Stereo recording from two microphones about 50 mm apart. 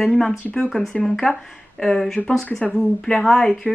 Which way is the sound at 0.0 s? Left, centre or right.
Centre.